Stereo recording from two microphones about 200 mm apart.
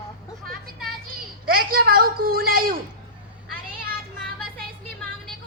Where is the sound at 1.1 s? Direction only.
45° right (ahead or behind).